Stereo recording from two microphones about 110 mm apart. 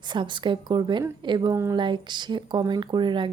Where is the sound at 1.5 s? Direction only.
25° right (ahead or behind).